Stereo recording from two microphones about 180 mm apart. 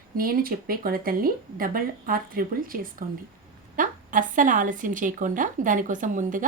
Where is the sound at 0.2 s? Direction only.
55° right (ahead or behind).